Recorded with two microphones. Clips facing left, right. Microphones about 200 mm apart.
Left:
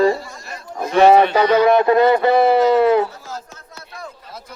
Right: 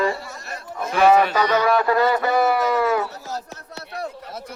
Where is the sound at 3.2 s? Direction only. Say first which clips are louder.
Right 2 dB; 40° right (ahead or behind).